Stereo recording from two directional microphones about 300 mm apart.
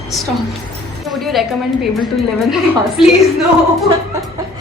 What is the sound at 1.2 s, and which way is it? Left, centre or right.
Speech, centre.